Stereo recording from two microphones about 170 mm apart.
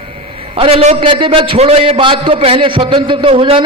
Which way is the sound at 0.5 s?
35° right (ahead or behind).